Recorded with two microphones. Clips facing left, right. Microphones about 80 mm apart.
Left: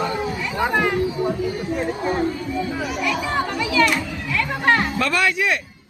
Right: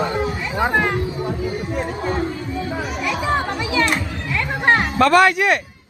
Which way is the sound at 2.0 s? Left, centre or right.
Centre.